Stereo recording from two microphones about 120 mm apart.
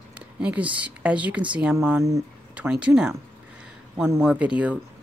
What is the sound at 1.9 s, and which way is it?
Speech, 25° right (ahead or behind).